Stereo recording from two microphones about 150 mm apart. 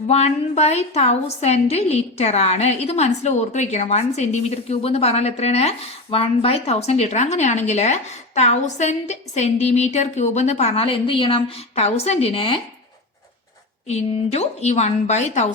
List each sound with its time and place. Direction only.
0.1 s a woman's voice: 45° left (ahead or behind)
13.8 s a woman's voice: 45° left (ahead or behind)